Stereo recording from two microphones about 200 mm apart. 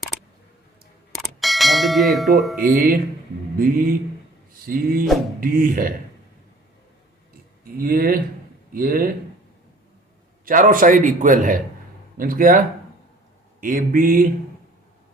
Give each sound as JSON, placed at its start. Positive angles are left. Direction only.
{"t": 1.1, "sound": "clang", "side_deg": 0}
{"t": 2.6, "sound": "speech", "side_deg": -45}
{"t": 7.6, "sound": "speech", "side_deg": -45}
{"t": 10.4, "sound": "a man's voice", "side_deg": -45}